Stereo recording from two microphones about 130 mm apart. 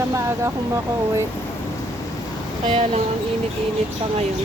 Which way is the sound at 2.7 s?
55° right (ahead or behind).